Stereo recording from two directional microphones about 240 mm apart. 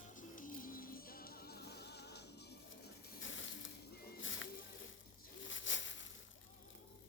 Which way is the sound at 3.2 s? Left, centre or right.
Left.